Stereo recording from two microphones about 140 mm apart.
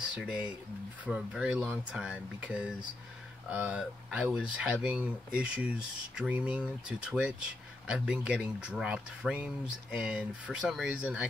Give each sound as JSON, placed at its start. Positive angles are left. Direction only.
{"t": 0.1, "sound": "speech", "side_deg": -10}